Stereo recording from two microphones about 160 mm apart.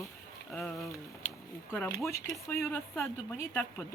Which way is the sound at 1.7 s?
10° left (ahead or behind).